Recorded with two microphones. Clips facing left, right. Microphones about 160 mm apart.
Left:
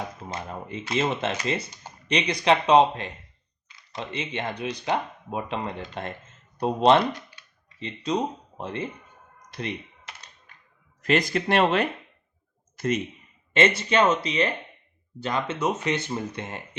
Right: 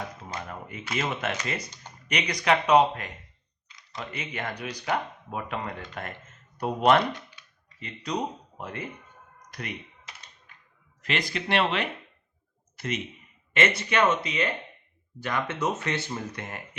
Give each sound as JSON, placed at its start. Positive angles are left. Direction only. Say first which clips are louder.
{"t": 0.3, "sound": "speech", "louder": "left 3 dB", "side_deg": 25}
{"t": 11.0, "sound": "a man's voice", "louder": "left 7 dB", "side_deg": 45}
{"t": 13.5, "sound": "speech", "louder": "left 4 dB", "side_deg": 30}